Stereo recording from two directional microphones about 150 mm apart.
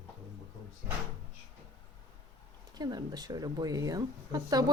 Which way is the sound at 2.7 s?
25° right (ahead or behind).